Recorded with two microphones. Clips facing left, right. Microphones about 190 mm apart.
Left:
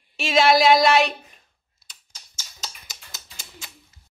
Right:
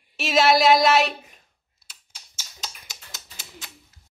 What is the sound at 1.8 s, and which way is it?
Typewriter, 5° right (ahead or behind).